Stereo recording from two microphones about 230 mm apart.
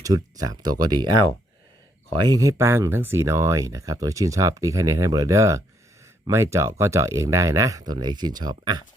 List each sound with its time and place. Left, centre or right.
0.0 s speech: centre
1.0 s speech: right
2.1 s speech: centre